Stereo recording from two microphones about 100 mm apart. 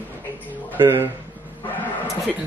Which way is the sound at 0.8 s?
25° right (ahead or behind).